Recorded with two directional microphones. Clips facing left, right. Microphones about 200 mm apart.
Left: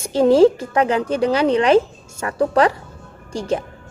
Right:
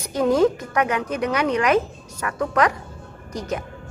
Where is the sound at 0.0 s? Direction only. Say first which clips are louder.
Left 6 dB; 30° left (ahead or behind).